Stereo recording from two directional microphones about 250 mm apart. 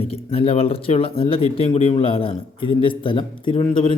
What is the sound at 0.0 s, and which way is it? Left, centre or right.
A man's voice, left.